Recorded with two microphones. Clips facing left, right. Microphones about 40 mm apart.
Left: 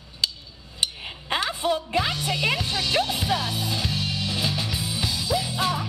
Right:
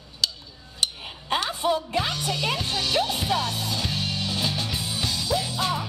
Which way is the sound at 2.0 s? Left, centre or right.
Centre.